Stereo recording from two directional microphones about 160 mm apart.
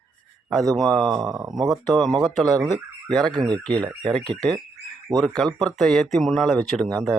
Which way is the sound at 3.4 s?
25° right (ahead or behind).